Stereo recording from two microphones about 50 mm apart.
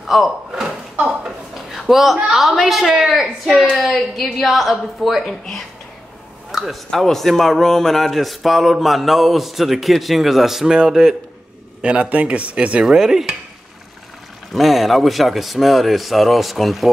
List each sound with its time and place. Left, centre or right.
0.0 s speech: centre
1.0 s a sound: centre
2.3 s a man's voice: centre
3.1 s cutlery: centre
3.8 s a man's voice: centre
11.8 s speech: right
12.8 s cutlery: centre
14.5 s a man's voice: centre